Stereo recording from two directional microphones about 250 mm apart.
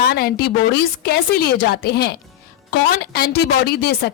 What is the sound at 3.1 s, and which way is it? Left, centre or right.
A woman's voice, left.